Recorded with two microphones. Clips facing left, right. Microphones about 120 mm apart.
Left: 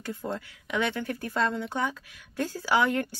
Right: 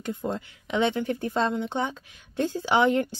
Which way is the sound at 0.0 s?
20° right (ahead or behind).